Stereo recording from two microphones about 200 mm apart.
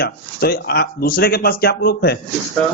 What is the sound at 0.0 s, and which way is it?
Speech, 50° left (ahead or behind).